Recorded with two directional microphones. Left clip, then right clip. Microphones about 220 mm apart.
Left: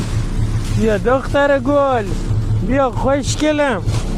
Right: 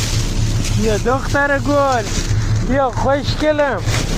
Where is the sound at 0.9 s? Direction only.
55° left (ahead or behind).